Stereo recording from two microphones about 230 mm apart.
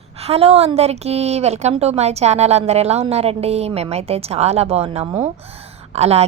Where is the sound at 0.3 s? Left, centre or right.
Right.